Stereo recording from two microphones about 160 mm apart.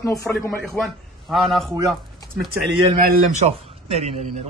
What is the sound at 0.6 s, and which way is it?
A man's voice, centre (ahead or behind).